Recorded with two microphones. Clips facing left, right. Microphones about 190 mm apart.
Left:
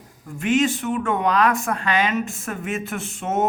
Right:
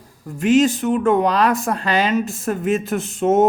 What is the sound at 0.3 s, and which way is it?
Speech, 35° right (ahead or behind).